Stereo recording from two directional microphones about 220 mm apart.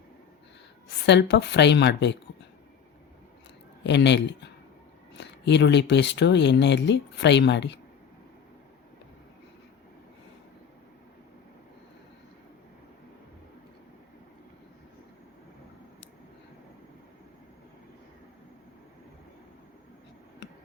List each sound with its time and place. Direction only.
1.0 s speech: 50° left (ahead or behind)
3.8 s speech: 50° left (ahead or behind)
20.4 s a sound: 50° left (ahead or behind)